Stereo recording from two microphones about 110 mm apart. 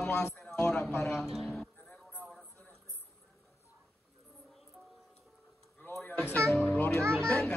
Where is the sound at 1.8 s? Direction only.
10° left (ahead or behind).